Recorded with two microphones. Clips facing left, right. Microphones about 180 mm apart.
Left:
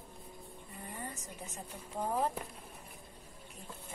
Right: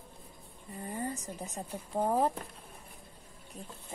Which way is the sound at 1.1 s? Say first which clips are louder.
Right 6 dB; 35° right (ahead or behind).